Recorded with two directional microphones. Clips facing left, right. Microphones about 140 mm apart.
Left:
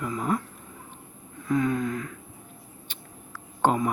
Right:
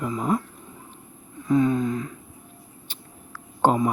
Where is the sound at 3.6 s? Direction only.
30° right (ahead or behind).